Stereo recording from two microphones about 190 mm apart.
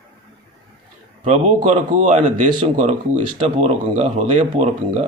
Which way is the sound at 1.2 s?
40° right (ahead or behind).